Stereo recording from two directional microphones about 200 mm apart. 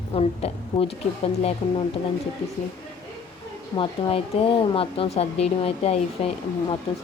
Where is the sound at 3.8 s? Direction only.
30° left (ahead or behind).